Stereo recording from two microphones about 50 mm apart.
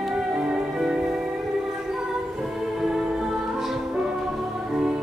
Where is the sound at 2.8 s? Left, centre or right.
Centre.